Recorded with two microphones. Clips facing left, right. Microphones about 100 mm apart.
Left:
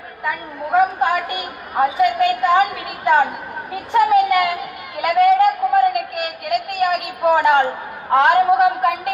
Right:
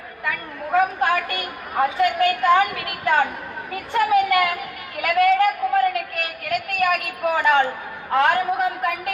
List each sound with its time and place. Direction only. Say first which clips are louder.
0.3 s a sound: left 3 dB; 20° left (ahead or behind)
2.1 s a woman's voice: left 2 dB; 15° left (ahead or behind)
8.4 s a woman's voice: left 7 dB; 75° left (ahead or behind)